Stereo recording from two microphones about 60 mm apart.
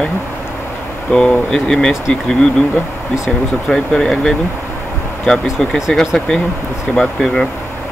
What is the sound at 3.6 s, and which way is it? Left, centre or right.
Speech, centre.